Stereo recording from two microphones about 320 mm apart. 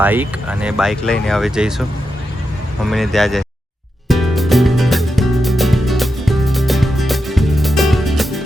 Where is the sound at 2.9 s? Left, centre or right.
Centre.